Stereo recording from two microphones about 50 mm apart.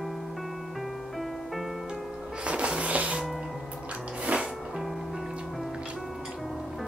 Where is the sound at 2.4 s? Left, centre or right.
Right.